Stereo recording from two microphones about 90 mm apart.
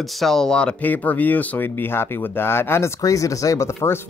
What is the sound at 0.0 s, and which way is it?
Speech, 5° left (ahead or behind).